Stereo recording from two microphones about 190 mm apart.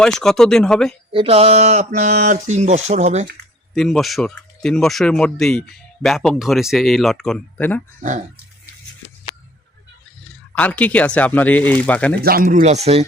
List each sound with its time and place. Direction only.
0.0 s speech: 5° left (ahead or behind)
1.1 s mantra: 30° right (ahead or behind)
3.8 s speech: centre (ahead or behind)
10.2 s speech: 10° left (ahead or behind)
12.2 s mantra: 50° right (ahead or behind); by 13.1 s 35° right (ahead or behind)